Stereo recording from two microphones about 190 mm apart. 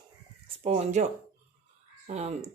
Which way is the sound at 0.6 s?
35° right (ahead or behind).